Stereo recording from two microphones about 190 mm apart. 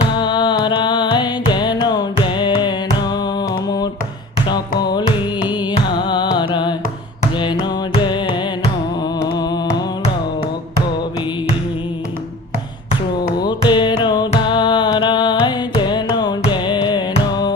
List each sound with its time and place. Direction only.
0.1 s music: 25° left (ahead or behind)
9.4 s a sound: 20° left (ahead or behind)
13.4 s music: 25° left (ahead or behind)
14.9 s carnatic music: 25° left (ahead or behind)